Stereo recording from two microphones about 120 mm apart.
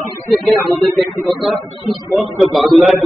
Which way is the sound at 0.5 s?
Centre (ahead or behind).